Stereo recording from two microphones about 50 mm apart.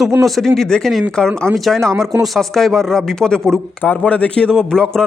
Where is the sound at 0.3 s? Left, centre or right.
Centre.